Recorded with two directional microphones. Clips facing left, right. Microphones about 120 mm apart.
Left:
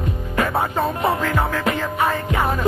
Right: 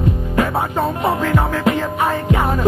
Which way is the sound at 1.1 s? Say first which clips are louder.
Right 3 dB; 20° right (ahead or behind).